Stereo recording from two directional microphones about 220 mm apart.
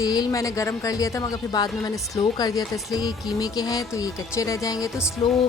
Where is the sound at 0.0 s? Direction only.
15° left (ahead or behind).